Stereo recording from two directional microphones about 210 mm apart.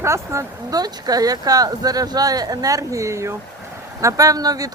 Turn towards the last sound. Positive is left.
turn(degrees=-15)  # may be behind; listen again after turning